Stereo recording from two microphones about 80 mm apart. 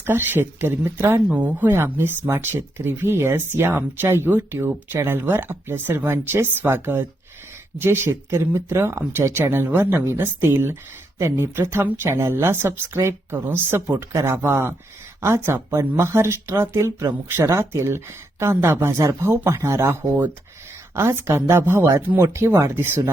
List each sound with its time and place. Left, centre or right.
0.0 s speech: right